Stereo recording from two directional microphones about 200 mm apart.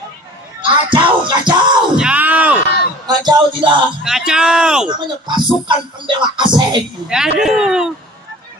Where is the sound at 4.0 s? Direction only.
Centre (ahead or behind).